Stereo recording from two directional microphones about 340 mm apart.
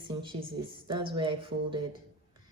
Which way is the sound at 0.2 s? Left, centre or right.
Centre.